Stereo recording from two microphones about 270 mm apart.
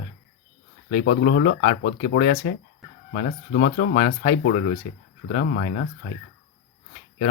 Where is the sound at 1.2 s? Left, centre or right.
Left.